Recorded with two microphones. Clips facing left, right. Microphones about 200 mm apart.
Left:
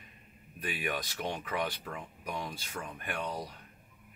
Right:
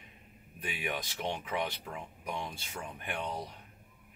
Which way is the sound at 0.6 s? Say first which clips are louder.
Left 2 dB; 20° right (ahead or behind).